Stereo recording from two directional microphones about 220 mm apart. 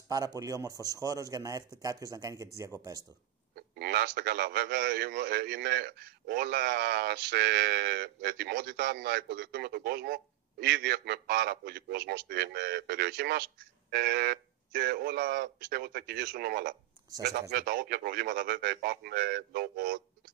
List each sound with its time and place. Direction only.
0.1 s a man's voice: 15° right (ahead or behind)
3.5 s a man's voice: 45° right (ahead or behind)